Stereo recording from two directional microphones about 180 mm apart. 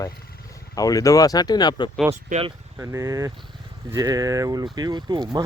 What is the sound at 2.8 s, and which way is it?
Speech, 15° right (ahead or behind).